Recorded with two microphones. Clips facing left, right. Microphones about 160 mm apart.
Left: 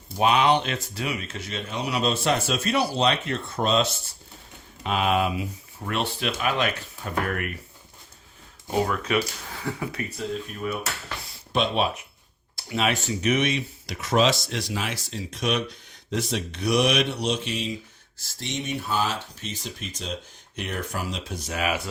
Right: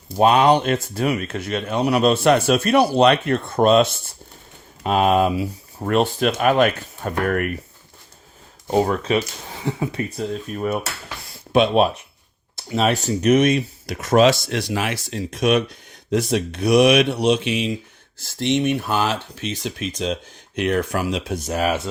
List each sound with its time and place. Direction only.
0.2 s speech: 45° right (ahead or behind)
4.8 s speech: 45° right (ahead or behind)
8.8 s speech: 30° right (ahead or behind)
10.5 s speech: 50° right (ahead or behind)
12.5 s speech: 30° right (ahead or behind); by 21.3 s 75° right (ahead or behind)
21.3 s speech: 45° right (ahead or behind)